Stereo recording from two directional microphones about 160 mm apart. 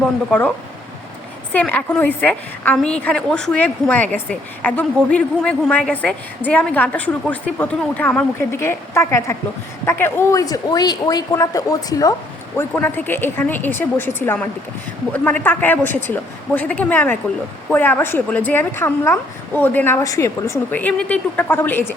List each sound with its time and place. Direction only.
0.3 s a woman's voice: 10° left (ahead or behind)
1.5 s a woman's voice: 10° left (ahead or behind)